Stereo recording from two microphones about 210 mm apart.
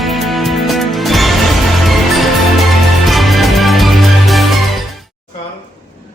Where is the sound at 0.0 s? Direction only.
Centre (ahead or behind).